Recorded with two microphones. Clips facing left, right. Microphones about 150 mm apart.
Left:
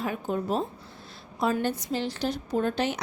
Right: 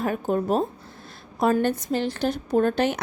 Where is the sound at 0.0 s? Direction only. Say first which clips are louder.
Right 5 dB; 50° right (ahead or behind).